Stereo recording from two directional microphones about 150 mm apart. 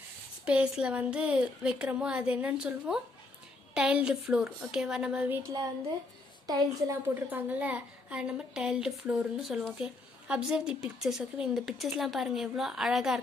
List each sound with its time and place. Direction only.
0.5 s a woman's voice: 5° right (ahead or behind)
5.4 s a woman's voice: 25° right (ahead or behind)
7.2 s a woman's voice: 10° right (ahead or behind)